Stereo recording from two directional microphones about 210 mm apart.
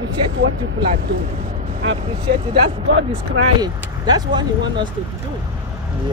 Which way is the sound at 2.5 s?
60° right (ahead or behind).